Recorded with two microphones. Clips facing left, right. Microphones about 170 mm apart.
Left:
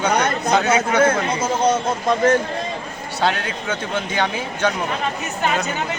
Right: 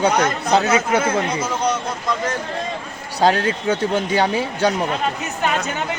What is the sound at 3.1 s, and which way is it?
A man's voice, 40° right (ahead or behind).